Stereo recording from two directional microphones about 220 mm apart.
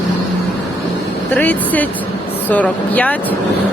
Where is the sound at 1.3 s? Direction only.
5° left (ahead or behind).